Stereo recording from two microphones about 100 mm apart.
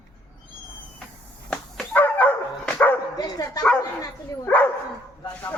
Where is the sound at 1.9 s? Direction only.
20° left (ahead or behind).